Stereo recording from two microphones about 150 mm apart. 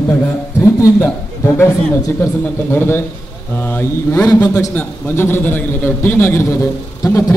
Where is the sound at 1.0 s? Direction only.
15° left (ahead or behind).